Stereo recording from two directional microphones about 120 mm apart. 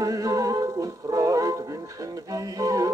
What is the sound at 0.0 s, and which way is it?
Music, 30° right (ahead or behind).